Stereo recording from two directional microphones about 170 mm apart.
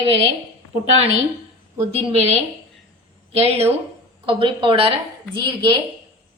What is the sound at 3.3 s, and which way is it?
A woman's voice, 35° right (ahead or behind).